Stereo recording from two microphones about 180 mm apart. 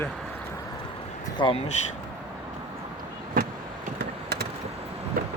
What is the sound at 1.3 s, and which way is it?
Speech, 25° left (ahead or behind).